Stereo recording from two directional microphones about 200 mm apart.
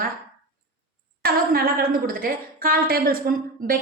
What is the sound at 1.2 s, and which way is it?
A woman's voice, 50° right (ahead or behind).